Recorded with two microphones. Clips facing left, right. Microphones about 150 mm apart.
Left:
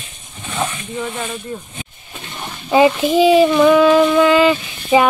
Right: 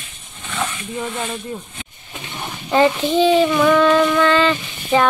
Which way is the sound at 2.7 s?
10° left (ahead or behind).